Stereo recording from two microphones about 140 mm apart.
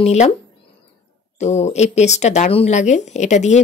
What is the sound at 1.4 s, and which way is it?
Speech, 55° left (ahead or behind).